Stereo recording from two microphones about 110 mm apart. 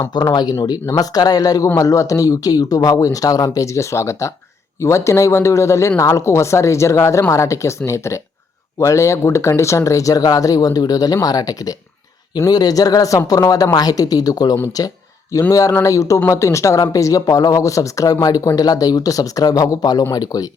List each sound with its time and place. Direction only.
0.1 s a woman's voice: 40° left (ahead or behind)